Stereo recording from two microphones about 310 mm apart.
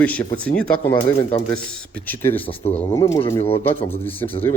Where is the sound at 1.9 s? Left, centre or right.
Centre.